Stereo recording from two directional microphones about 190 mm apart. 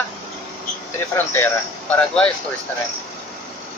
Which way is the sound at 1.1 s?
10° left (ahead or behind).